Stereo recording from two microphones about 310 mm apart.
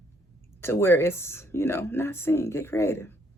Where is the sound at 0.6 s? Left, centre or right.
Centre.